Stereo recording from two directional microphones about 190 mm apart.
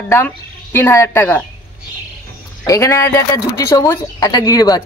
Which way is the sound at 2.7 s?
15° left (ahead or behind).